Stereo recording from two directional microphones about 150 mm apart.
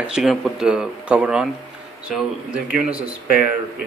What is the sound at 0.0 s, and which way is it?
Speech, 5° right (ahead or behind).